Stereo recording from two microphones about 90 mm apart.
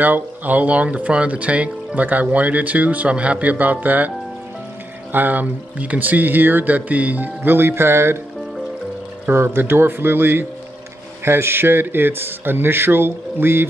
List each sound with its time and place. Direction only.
0.0 s speech: 20° right (ahead or behind)
5.1 s speech: 20° right (ahead or behind)
9.3 s speech: 25° right (ahead or behind)